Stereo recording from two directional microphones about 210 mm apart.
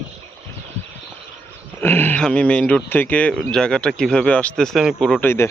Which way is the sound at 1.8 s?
10° left (ahead or behind).